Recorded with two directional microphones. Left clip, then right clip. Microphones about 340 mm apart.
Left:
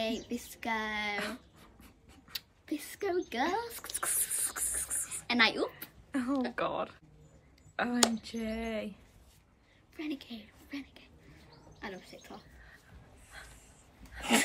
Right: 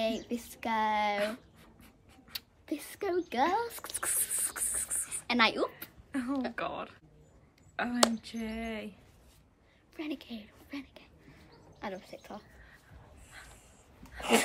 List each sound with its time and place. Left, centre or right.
0.0 s speech: centre
1.2 s writing: centre
2.3 s speech: centre
4.0 s a sound: centre
6.1 s speech: centre
9.9 s a woman's voice: centre
13.3 s a sound: centre
14.3 s dog: centre